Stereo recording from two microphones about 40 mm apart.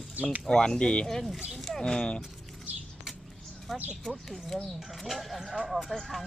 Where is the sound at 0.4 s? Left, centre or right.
Centre.